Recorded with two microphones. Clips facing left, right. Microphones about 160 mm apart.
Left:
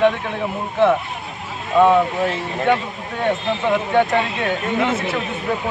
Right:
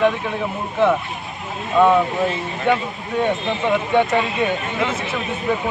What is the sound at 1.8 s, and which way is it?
Speech, centre (ahead or behind).